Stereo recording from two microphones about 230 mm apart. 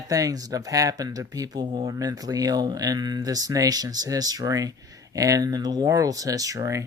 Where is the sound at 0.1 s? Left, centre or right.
Centre.